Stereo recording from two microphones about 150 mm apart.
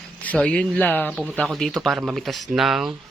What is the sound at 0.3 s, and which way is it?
Speech, 5° left (ahead or behind).